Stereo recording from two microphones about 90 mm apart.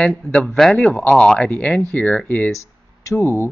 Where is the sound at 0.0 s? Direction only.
5° left (ahead or behind).